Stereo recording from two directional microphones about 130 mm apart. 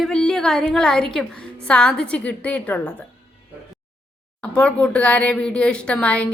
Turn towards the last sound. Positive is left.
turn(degrees=10)  # may be behind; listen again after turning